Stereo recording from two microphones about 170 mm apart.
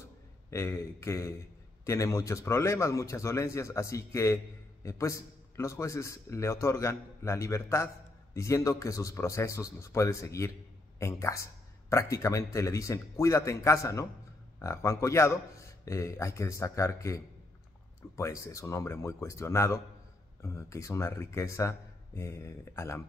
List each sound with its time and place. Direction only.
0.5 s a man's voice: 15° left (ahead or behind)